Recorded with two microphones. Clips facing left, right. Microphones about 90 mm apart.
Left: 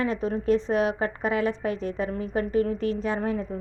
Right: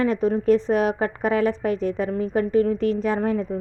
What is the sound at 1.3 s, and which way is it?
Speech, 25° left (ahead or behind).